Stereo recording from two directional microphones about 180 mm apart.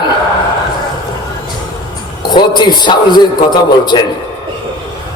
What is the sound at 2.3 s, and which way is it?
A man's voice, 25° left (ahead or behind).